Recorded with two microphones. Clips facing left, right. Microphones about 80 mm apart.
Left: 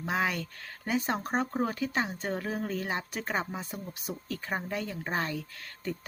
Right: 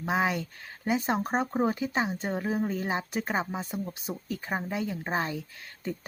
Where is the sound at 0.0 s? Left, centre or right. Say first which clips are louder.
Right 3 dB; centre.